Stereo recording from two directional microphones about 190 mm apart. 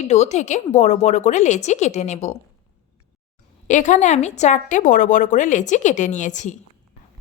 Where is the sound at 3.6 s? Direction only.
40° left (ahead or behind).